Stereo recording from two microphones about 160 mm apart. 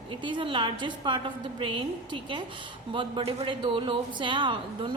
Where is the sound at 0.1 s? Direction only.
30° right (ahead or behind).